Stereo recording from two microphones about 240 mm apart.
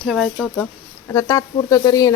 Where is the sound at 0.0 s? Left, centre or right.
Centre.